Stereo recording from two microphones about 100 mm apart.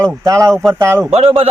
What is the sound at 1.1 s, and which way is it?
Speech, 70° right (ahead or behind).